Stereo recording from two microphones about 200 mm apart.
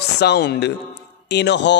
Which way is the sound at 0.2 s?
55° left (ahead or behind).